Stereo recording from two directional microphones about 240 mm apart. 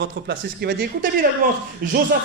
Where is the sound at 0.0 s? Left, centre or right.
Right.